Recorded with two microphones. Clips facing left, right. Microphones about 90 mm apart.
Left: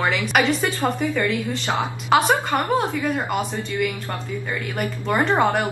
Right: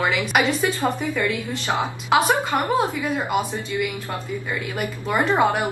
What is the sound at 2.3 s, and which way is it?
Speech, 20° right (ahead or behind).